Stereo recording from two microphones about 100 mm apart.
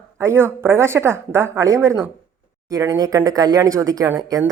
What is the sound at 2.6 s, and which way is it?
Speech, 35° right (ahead or behind).